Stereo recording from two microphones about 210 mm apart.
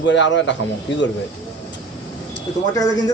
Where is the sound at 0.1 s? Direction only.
60° left (ahead or behind).